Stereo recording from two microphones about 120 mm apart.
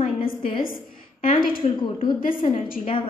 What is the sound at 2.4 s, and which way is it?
Speech, 90° left.